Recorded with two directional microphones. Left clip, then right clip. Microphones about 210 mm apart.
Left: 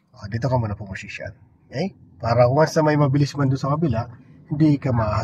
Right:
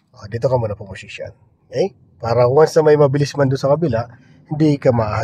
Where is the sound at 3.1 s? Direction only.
45° right (ahead or behind).